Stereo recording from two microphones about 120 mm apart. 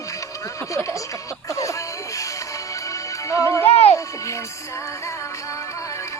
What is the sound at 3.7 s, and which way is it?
Music, 55° left (ahead or behind).